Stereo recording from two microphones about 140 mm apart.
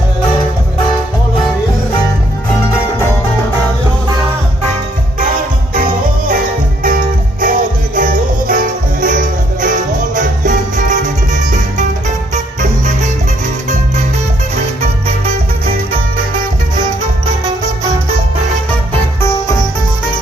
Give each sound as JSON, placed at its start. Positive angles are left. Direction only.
{"t": 5.8, "sound": "music", "side_deg": -90}
{"t": 10.1, "sound": "music", "side_deg": -65}